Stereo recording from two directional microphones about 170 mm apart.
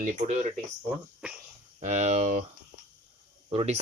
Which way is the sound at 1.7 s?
45° right (ahead or behind).